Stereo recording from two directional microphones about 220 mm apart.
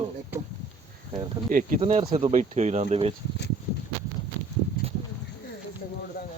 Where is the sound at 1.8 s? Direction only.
30° right (ahead or behind).